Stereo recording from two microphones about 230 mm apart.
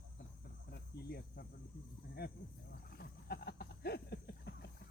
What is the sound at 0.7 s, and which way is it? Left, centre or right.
Speech, left.